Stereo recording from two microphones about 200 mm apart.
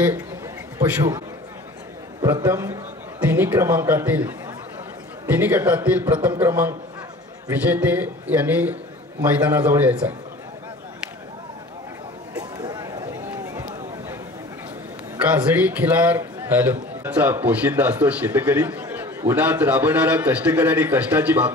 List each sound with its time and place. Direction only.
0.7 s a man's voice: 15° right (ahead or behind)
2.4 s a man's voice: 15° right (ahead or behind)
12.5 s a sound: 20° right (ahead or behind)
15.1 s a man's voice: 5° right (ahead or behind)